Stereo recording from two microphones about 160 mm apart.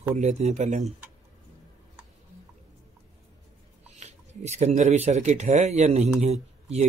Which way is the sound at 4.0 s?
45° right (ahead or behind).